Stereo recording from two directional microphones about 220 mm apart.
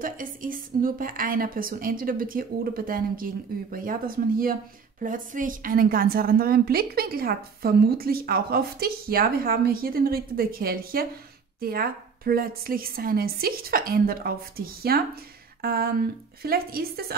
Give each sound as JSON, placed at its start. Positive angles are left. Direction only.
{"t": 0.0, "sound": "a woman's voice", "side_deg": -40}